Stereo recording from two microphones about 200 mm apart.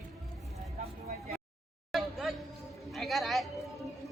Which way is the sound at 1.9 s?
Centre (ahead or behind).